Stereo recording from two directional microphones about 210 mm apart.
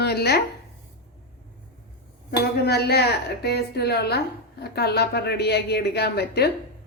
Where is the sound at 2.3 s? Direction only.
50° left (ahead or behind).